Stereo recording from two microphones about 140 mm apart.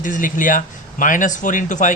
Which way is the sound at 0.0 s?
70° left (ahead or behind).